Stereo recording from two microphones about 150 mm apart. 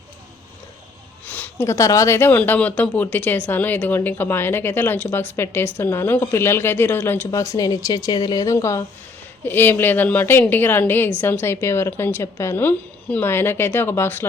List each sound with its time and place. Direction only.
1.3 s speech: 15° left (ahead or behind)